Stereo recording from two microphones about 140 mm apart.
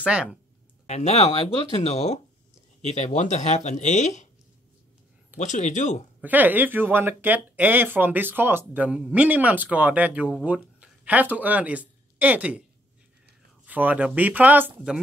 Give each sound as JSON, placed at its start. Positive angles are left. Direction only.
{"t": 0.0, "sound": "speech", "side_deg": -5}
{"t": 0.8, "sound": "speech", "side_deg": 50}
{"t": 5.4, "sound": "speech", "side_deg": 60}
{"t": 6.2, "sound": "speech", "side_deg": -10}
{"t": 13.7, "sound": "speech", "side_deg": -10}